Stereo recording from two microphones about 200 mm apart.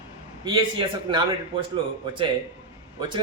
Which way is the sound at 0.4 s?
25° right (ahead or behind).